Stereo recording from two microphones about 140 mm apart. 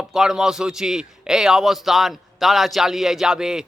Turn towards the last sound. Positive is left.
turn(degrees=-5)  # may be behind; listen again after turning